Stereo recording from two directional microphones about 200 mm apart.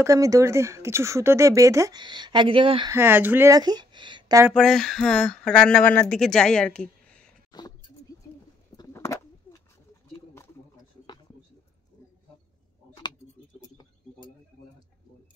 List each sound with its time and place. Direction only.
0.0 s speech: 15° right (ahead or behind)
2.9 s speech: 10° right (ahead or behind)
4.6 s speech: centre (ahead or behind)
7.5 s speech: 20° left (ahead or behind)
8.7 s bird: 15° left (ahead or behind)